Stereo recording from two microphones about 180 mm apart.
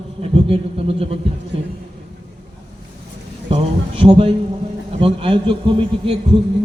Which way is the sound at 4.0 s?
30° right (ahead or behind).